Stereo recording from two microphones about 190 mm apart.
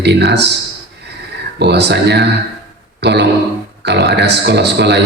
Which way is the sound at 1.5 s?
60° right (ahead or behind).